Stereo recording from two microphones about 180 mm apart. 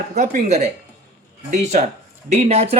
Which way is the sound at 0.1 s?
40° right (ahead or behind).